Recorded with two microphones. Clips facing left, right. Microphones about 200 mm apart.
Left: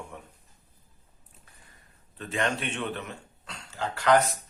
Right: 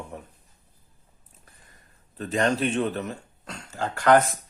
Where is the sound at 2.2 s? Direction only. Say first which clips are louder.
Right 6 dB; 40° right (ahead or behind).